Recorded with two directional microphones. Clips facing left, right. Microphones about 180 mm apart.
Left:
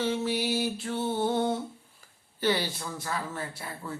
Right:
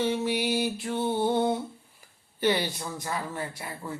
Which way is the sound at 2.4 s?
15° right (ahead or behind).